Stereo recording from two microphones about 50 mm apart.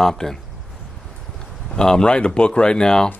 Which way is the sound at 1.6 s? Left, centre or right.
Centre.